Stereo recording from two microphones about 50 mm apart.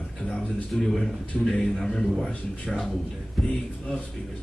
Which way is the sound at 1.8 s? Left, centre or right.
Centre.